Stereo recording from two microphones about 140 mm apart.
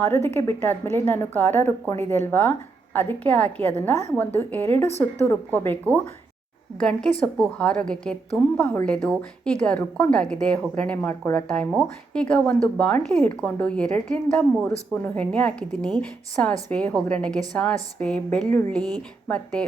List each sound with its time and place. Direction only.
0.0 s speech: 15° left (ahead or behind)